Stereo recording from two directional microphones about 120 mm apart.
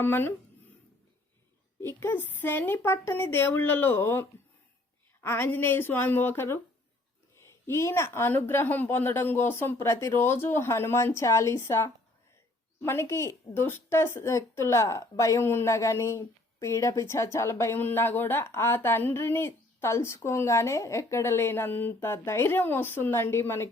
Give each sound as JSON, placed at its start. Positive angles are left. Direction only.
{"t": 0.0, "sound": "a woman's voice", "side_deg": 15}
{"t": 1.8, "sound": "a woman's voice", "side_deg": 20}